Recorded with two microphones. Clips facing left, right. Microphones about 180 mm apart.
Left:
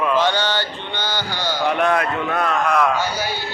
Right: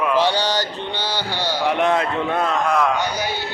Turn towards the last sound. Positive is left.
turn(degrees=-20)  # may be behind; listen again after turning